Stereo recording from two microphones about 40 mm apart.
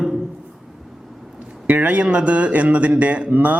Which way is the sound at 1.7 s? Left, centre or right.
Right.